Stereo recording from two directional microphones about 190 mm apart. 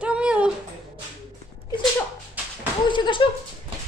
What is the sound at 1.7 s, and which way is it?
Sneeze, 25° left (ahead or behind).